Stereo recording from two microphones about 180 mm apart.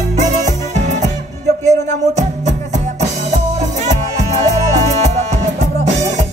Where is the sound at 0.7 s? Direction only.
40° right (ahead or behind).